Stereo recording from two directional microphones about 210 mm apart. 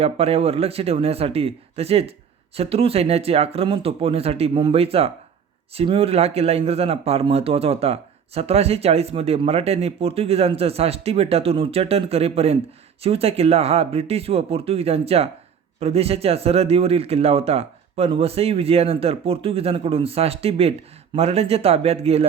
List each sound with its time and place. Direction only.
0.0 s speech: 30° right (ahead or behind)